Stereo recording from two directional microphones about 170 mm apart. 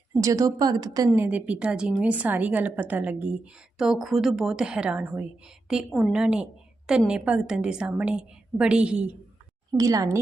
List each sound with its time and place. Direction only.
0.2 s a woman's voice: 20° right (ahead or behind)
9.7 s a woman's voice: 20° right (ahead or behind)